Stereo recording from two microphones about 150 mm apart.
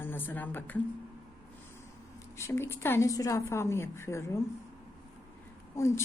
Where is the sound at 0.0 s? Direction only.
10° left (ahead or behind).